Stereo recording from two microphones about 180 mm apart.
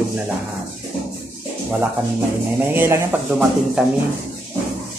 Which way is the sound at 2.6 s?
15° right (ahead or behind).